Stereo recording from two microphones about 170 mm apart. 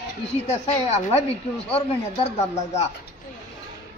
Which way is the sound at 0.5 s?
40° left (ahead or behind).